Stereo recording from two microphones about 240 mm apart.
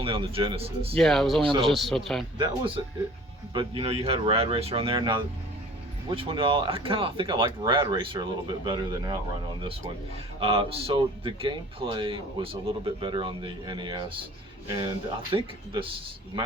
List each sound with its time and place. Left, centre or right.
0.0 s speech: right
0.9 s speech: centre
1.4 s speech: right
1.6 s speech: centre
2.4 s speech: right
10.4 s speech: right
15.3 s speech: right